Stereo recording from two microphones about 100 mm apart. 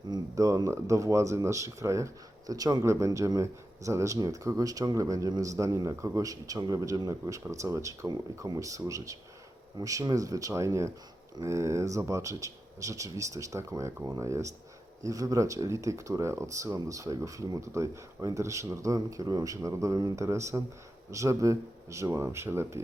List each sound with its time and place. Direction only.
0.1 s speech: 35° right (ahead or behind)